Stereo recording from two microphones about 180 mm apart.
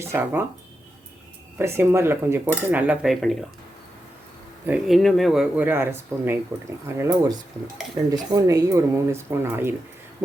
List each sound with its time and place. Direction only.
0.0 s speech: 15° right (ahead or behind)
1.5 s speech: 15° right (ahead or behind)
2.6 s cutlery: 10° right (ahead or behind)
4.6 s speech: 5° right (ahead or behind)